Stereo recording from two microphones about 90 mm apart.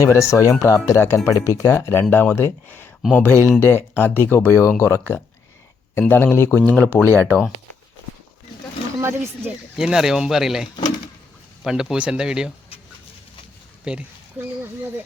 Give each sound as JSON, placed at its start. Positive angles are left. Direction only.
{"t": 0.0, "sound": "speech", "side_deg": 35}
{"t": 9.0, "sound": "a sound", "side_deg": -30}
{"t": 9.7, "sound": "speech", "side_deg": -5}
{"t": 13.9, "sound": "speech", "side_deg": -10}